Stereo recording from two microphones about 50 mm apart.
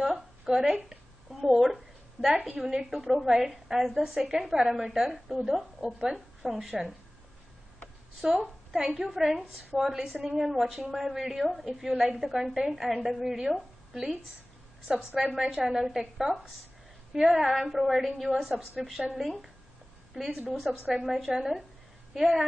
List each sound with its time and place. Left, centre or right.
0.0 s a sound: centre
1.5 s a woman's voice: centre
8.2 s a woman's voice: centre
11.9 s a woman's voice: right
12.2 s a woman's voice: centre
15.1 s a woman's voice: centre
20.5 s a woman's voice: centre